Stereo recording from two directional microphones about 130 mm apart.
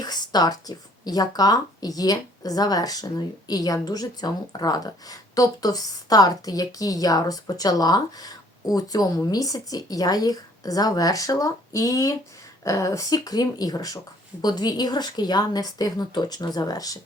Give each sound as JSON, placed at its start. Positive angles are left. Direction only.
{"t": 0.0, "sound": "a woman's voice", "side_deg": 30}